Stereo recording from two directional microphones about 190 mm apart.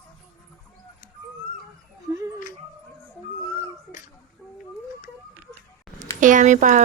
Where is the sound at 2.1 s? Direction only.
15° right (ahead or behind).